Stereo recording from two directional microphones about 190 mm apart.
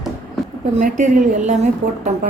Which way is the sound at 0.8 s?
40° right (ahead or behind).